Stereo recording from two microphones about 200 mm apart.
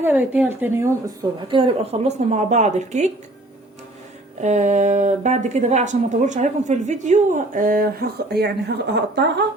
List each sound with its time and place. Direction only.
0.0 s a woman's voice: 10° right (ahead or behind)
1.5 s a woman's voice: 25° right (ahead or behind)
4.4 s a woman's voice: 35° right (ahead or behind); by 9.4 s 60° right (ahead or behind)